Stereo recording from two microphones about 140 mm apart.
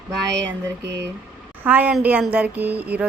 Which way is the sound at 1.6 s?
10° right (ahead or behind).